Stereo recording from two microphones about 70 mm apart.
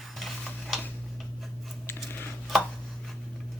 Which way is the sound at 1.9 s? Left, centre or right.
Left.